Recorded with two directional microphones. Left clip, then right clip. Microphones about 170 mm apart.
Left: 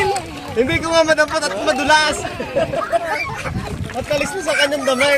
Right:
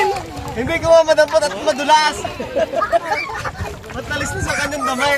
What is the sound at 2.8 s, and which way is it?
Speech, 20° right (ahead or behind).